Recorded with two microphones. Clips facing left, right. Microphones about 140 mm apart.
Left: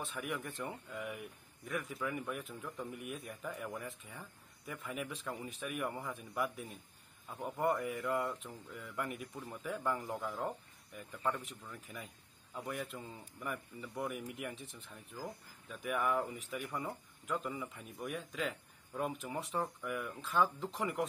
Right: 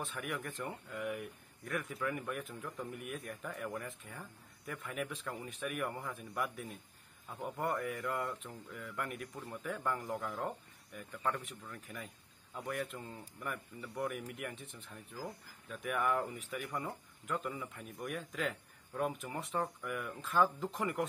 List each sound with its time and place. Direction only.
0.0 s speech: centre (ahead or behind)
7.6 s speech: 10° left (ahead or behind)